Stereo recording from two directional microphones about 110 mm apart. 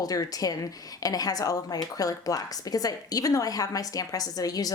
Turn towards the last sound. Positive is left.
turn(degrees=35)  # may be behind; listen again after turning